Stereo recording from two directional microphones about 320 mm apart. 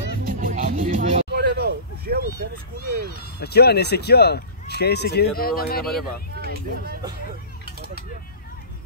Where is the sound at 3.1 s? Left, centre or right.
Left.